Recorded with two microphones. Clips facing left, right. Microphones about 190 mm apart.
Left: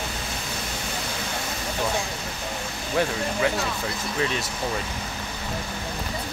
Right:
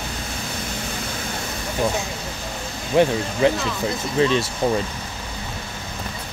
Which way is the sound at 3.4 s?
25° right (ahead or behind).